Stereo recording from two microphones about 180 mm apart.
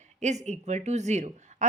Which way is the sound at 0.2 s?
40° right (ahead or behind).